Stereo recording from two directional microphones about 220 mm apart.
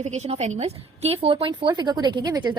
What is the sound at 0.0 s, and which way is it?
A woman's voice, 30° right (ahead or behind).